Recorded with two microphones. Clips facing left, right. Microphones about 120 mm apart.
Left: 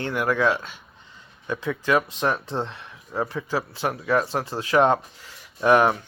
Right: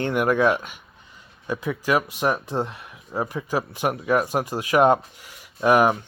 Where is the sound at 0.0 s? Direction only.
20° right (ahead or behind).